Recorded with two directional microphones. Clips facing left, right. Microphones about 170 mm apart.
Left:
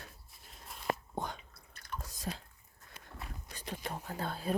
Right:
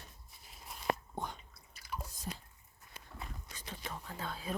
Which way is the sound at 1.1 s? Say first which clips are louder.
Left 3 dB; 90° left.